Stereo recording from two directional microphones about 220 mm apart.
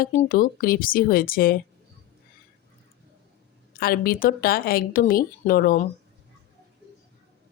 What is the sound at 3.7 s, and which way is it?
Speech, 40° left (ahead or behind).